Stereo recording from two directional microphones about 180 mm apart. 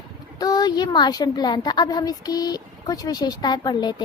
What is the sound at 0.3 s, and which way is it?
A woman's voice, 20° left (ahead or behind).